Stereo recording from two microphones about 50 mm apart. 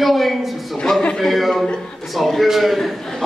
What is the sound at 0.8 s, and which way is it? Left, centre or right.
Speech, centre.